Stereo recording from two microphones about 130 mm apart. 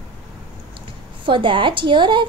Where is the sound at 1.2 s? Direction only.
40° right (ahead or behind).